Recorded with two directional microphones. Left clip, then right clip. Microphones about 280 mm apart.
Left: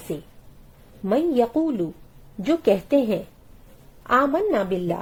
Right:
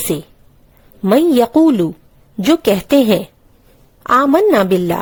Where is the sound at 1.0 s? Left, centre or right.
Right.